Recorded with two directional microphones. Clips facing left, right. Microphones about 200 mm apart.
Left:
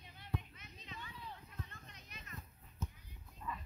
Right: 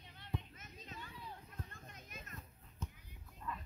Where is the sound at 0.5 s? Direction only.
45° right (ahead or behind).